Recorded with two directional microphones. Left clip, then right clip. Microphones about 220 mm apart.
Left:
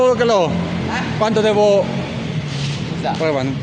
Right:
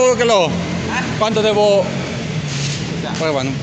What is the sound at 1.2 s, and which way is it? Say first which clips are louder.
Speech: even; 30° left (ahead or behind).